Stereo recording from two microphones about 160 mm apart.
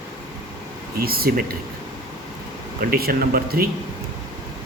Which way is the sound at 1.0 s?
70° right (ahead or behind).